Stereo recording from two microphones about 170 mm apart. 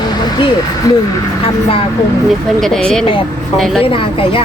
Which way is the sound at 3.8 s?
30° left (ahead or behind).